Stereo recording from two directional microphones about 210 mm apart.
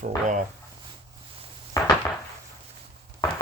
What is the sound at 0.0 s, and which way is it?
Speech, 35° right (ahead or behind).